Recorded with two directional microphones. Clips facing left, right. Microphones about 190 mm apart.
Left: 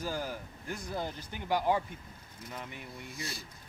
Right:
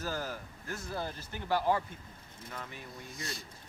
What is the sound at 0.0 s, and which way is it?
Speech, 15° left (ahead or behind).